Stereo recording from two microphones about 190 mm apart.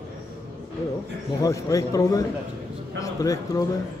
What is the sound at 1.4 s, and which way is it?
A man's voice, 20° left (ahead or behind).